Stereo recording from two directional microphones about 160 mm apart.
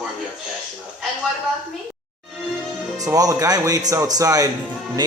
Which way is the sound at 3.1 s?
20° right (ahead or behind).